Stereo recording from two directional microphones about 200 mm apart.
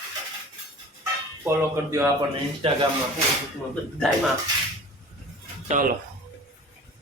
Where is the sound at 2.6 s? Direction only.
30° right (ahead or behind).